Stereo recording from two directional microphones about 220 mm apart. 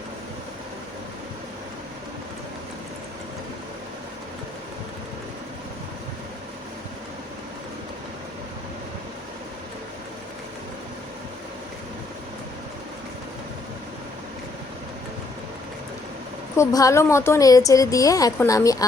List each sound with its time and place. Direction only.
16.6 s speech: 15° left (ahead or behind)